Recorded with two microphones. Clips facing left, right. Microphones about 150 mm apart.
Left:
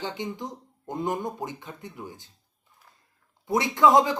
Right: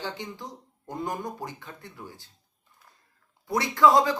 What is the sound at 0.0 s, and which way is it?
Speech, 20° left (ahead or behind).